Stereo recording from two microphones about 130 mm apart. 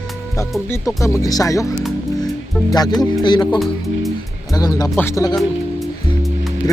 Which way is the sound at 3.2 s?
35° left (ahead or behind).